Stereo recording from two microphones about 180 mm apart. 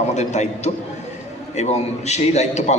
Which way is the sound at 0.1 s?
40° left (ahead or behind).